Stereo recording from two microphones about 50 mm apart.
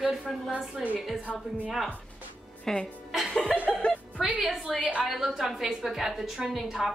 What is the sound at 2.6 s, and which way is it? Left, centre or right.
A woman's voice, centre.